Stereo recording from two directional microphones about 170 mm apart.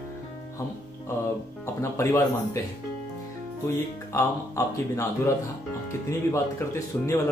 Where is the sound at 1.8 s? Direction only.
15° left (ahead or behind).